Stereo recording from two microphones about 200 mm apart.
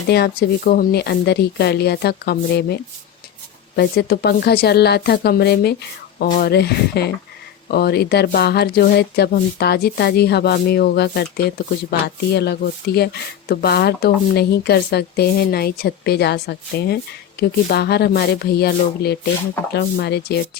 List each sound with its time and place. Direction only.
0.1 s speech: 50° left (ahead or behind)